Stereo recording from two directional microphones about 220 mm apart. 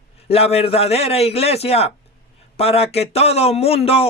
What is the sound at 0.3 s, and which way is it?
A man's voice, 25° left (ahead or behind).